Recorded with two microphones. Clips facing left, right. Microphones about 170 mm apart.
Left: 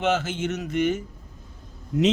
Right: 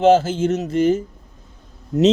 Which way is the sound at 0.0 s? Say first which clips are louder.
Right 10 dB; 30° right (ahead or behind).